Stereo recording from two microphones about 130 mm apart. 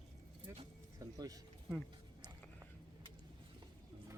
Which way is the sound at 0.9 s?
30° right (ahead or behind).